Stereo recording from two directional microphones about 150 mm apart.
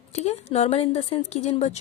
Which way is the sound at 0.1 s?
45° left (ahead or behind).